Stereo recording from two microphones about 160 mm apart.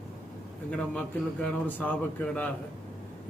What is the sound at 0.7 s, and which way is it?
A man's voice, 5° left (ahead or behind).